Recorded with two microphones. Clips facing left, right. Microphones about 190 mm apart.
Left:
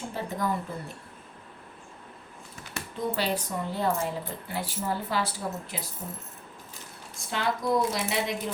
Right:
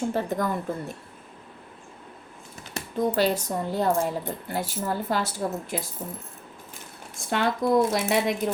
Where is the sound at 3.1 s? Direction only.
45° right (ahead or behind).